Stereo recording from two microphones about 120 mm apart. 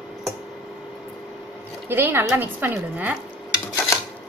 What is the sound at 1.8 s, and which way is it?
Speech, 20° right (ahead or behind).